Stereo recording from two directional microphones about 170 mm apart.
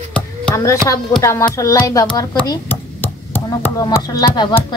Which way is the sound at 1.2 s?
15° left (ahead or behind).